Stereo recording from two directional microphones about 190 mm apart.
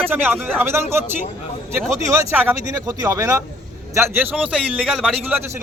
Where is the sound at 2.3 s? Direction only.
5° right (ahead or behind).